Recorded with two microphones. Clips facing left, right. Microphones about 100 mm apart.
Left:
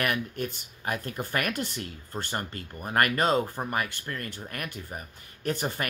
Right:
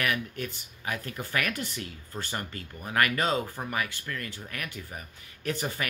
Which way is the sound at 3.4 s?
20° left (ahead or behind).